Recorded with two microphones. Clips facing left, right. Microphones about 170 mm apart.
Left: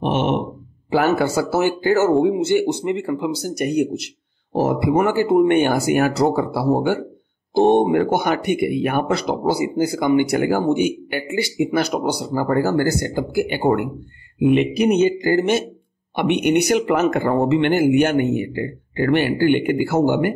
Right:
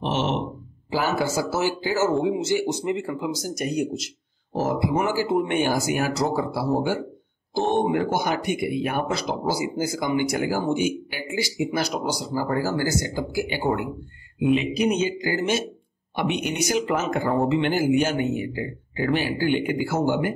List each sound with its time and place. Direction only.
0.0 s groan: 55° left (ahead or behind)
0.8 s speech: 60° left (ahead or behind)
7.8 s speech: 60° left (ahead or behind)